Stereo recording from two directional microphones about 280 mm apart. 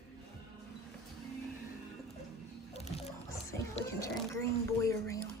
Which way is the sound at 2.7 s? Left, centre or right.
Left.